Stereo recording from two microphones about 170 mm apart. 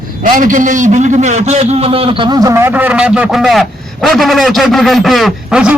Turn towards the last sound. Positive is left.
turn(degrees=-5)  # may be behind; listen again after turning